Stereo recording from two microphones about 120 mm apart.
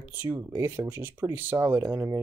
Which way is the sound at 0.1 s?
15° right (ahead or behind).